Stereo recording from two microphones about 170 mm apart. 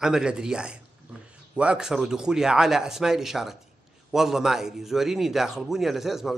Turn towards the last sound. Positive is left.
turn(degrees=0)  # may be behind; listen again after turning